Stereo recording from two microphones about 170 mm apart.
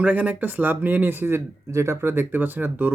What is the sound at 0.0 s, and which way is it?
Speech, 10° right (ahead or behind).